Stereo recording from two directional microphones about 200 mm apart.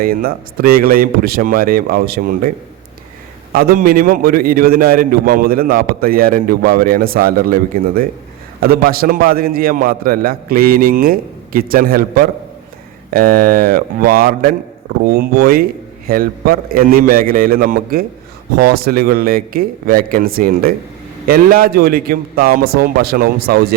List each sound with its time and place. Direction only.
0.0 s a man's voice: 50° right (ahead or behind)
3.5 s a man's voice: 50° right (ahead or behind)